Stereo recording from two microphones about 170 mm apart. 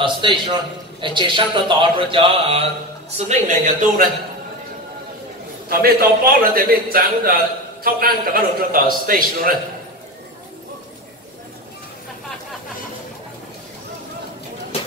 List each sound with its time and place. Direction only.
0.0 s a man's voice: 30° right (ahead or behind)
3.3 s a man's voice: 45° right (ahead or behind)
5.7 s a man's voice: 60° right (ahead or behind)